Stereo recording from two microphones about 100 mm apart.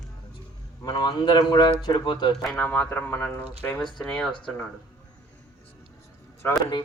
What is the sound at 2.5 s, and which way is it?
Speech, 15° left (ahead or behind).